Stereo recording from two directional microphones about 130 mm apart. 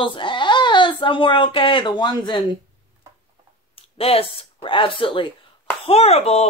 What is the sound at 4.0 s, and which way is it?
Speech, 50° left (ahead or behind).